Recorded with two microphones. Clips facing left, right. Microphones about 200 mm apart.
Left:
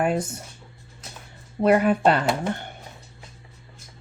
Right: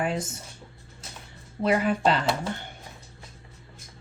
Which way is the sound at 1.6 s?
55° left (ahead or behind).